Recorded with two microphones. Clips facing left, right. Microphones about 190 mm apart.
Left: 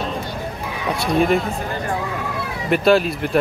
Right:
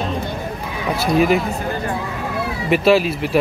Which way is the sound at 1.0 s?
5° right (ahead or behind).